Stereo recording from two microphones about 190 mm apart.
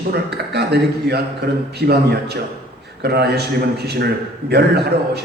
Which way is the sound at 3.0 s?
55° right (ahead or behind).